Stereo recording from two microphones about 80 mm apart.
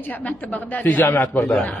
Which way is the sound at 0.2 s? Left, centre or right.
Centre.